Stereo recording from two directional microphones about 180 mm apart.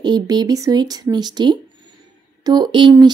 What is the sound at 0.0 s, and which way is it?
Speech, 25° right (ahead or behind).